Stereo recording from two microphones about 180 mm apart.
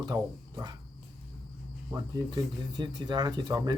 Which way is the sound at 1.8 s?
15° right (ahead or behind).